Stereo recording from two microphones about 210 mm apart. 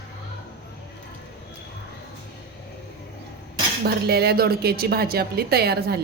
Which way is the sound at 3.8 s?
50° right (ahead or behind).